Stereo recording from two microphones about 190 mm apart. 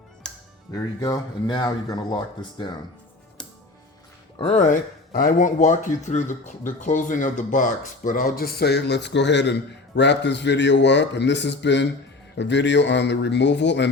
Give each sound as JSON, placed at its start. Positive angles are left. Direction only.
{"t": 0.2, "sound": "music", "side_deg": 5}
{"t": 0.7, "sound": "speech", "side_deg": 20}
{"t": 4.4, "sound": "a man's voice", "side_deg": 35}